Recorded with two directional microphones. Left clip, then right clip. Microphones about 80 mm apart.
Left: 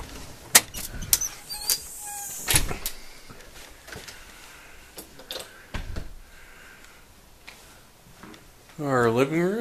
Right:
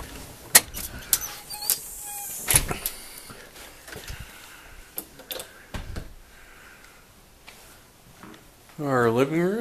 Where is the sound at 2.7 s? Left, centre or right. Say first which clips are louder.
Right 2 dB; right.